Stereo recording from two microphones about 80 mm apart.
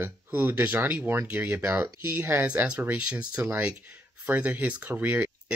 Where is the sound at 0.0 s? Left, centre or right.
Right.